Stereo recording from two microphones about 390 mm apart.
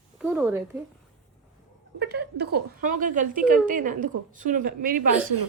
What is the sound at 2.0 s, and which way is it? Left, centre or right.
A woman's voice, right.